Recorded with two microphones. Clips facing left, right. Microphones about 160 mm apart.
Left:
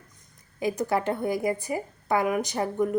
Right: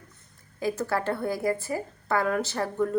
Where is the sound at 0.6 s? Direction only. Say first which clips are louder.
Left 2 dB; 20° left (ahead or behind).